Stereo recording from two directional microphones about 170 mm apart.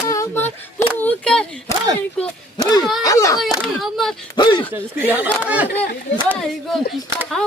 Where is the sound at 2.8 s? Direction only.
Centre (ahead or behind).